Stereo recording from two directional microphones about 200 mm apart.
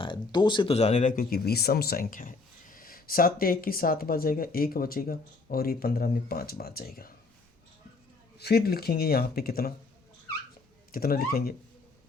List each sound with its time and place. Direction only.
0.0 s speech: 25° left (ahead or behind); by 7.1 s 50° left (ahead or behind)
8.4 s speech: 50° left (ahead or behind)
10.9 s speech: 45° left (ahead or behind)